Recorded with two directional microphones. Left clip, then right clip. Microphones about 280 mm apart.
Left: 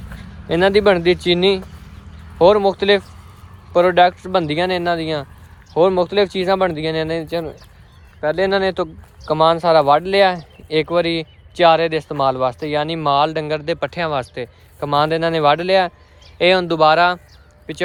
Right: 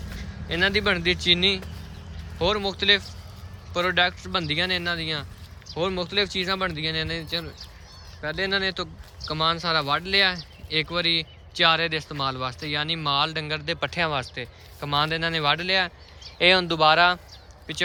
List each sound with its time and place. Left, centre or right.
0.4 s speech: centre